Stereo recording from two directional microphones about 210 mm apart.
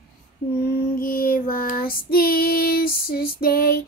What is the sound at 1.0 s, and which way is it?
Child singing, 40° left (ahead or behind).